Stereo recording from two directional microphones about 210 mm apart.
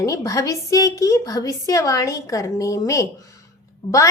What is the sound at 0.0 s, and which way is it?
A woman's voice, 15° left (ahead or behind).